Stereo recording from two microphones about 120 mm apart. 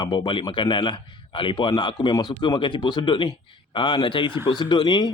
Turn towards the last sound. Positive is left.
turn(degrees=40)  # may be behind; listen again after turning